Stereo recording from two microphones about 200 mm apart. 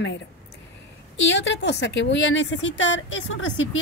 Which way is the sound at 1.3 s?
60° left (ahead or behind).